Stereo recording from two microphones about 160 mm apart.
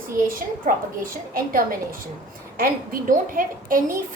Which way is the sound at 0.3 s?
60° right (ahead or behind).